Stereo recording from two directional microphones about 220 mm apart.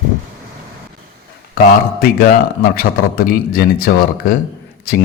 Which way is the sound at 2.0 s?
45° left (ahead or behind).